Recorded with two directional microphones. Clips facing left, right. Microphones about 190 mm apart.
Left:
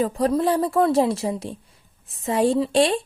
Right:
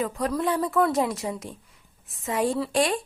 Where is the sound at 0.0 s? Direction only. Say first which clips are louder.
Left 6 dB; 30° left (ahead or behind).